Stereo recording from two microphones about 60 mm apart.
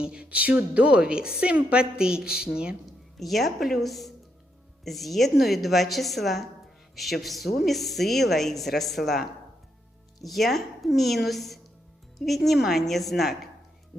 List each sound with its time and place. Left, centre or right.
0.0 s a woman's voice: centre
3.2 s speech: centre